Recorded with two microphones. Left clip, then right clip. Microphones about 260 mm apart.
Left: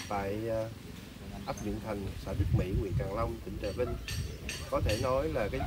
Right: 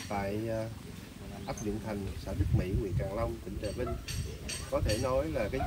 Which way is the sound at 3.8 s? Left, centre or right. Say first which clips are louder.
Left 3 dB; centre.